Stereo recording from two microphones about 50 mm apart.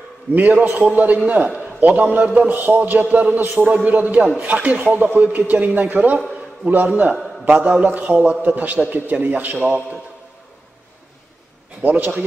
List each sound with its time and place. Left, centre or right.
0.3 s a man's voice: right
9.7 s a man's voice: right
11.8 s a man's voice: right